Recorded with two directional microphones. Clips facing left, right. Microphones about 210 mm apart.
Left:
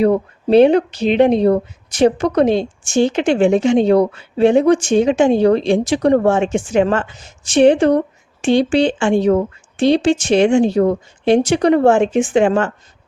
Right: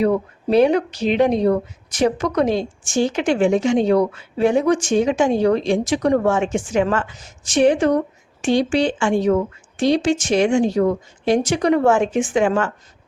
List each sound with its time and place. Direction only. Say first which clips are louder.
0.0 s speech: left 4 dB; 30° left (ahead or behind)